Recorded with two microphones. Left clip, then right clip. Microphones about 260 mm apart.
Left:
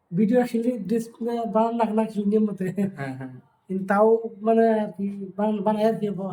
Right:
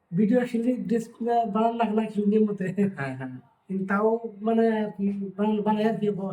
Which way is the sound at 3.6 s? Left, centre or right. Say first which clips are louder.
Left 5 dB; centre.